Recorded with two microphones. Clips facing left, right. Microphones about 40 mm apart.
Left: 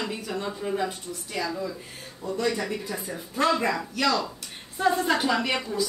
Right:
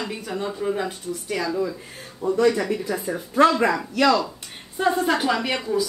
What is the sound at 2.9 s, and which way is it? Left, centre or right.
Speech, right.